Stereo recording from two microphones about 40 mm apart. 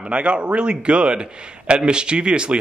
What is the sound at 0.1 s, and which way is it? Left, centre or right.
A man's voice, right.